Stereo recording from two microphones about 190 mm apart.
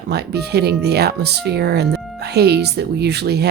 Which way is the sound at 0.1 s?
60° right (ahead or behind).